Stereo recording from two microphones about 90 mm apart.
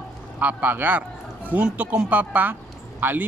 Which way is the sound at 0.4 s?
15° right (ahead or behind).